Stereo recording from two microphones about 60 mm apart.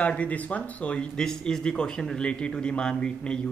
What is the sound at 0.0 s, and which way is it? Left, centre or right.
Speech, left.